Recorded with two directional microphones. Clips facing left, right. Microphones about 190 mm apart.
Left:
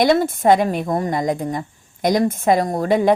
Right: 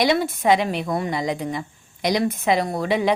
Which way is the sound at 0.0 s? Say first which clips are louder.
Left 4 dB; 50° left (ahead or behind).